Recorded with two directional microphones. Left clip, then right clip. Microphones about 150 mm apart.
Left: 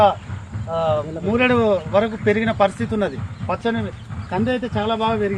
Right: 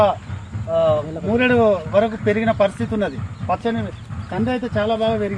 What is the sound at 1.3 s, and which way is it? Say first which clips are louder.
A man's voice: right 1 dB; 20° left (ahead or behind).